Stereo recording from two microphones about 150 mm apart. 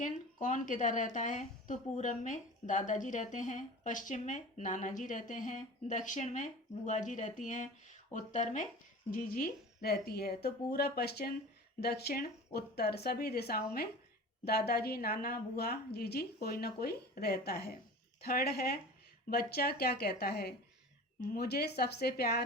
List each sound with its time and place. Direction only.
0.0 s a woman's voice: 60° left (ahead or behind)
9.0 s a woman's voice: 70° left (ahead or behind); by 22.4 s 90° left